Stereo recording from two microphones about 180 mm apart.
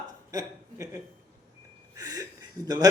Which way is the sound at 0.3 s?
20° right (ahead or behind).